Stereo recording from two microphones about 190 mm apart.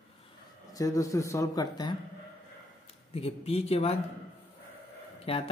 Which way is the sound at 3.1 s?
30° left (ahead or behind).